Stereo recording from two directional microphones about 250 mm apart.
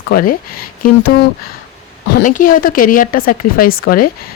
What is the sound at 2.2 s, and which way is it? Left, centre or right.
Speech, left.